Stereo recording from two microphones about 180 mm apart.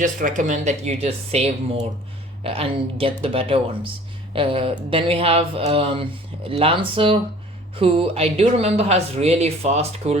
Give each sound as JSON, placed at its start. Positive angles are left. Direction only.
{"t": 0.0, "sound": "speech", "side_deg": -45}